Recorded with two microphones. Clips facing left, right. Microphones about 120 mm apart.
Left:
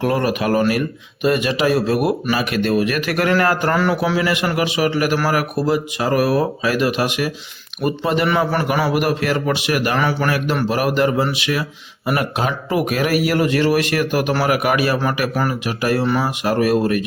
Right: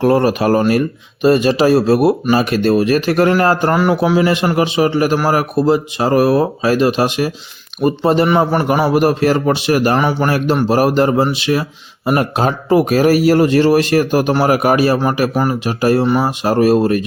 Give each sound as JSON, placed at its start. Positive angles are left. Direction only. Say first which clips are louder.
{"t": 0.0, "sound": "speech", "louder": "right 6 dB", "side_deg": -30}
{"t": 3.8, "sound": "speech", "louder": "right 5 dB", "side_deg": -15}
{"t": 10.0, "sound": "speech", "louder": "right 4 dB", "side_deg": -20}
{"t": 10.2, "sound": "speech", "louder": "right 5 dB", "side_deg": -30}